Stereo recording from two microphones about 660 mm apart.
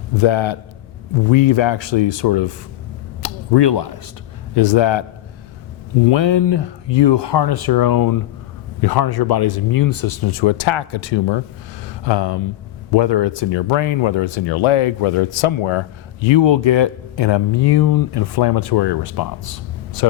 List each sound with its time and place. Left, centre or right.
0.2 s speech: left
6.1 s speech: left